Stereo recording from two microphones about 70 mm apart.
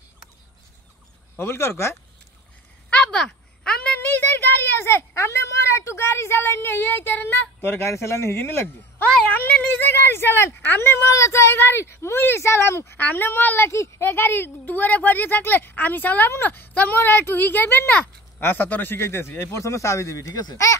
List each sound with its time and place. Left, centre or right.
1.4 s speech: left
2.9 s a sound: centre
4.0 s speech: left
13.7 s speech: left